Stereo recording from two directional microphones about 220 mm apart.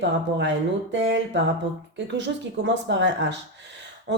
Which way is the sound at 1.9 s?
55° right (ahead or behind).